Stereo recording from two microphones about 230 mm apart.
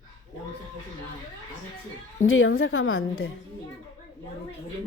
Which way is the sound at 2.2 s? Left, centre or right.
Left.